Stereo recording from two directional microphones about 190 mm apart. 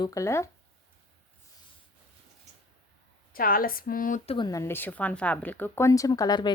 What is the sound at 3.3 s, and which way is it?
Speech, 50° left (ahead or behind).